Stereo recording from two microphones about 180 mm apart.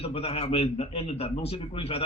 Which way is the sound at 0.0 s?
35° left (ahead or behind).